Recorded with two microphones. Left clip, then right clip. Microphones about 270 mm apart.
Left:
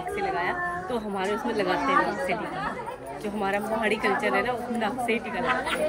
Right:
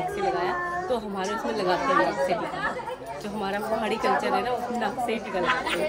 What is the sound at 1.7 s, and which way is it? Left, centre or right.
Speech, centre.